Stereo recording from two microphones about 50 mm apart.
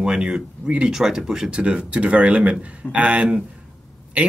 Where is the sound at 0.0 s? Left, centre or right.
Centre.